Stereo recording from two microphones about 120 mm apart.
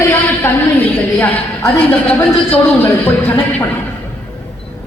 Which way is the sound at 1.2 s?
15° left (ahead or behind).